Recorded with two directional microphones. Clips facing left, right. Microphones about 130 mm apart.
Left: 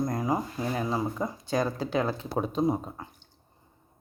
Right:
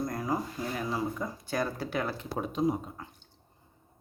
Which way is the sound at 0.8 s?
25° left (ahead or behind).